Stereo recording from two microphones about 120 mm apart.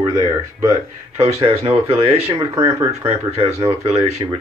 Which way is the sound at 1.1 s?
55° right (ahead or behind).